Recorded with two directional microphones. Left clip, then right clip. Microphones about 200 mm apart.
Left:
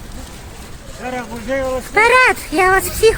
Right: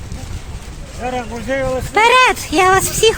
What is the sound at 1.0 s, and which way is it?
Speech, 55° right (ahead or behind).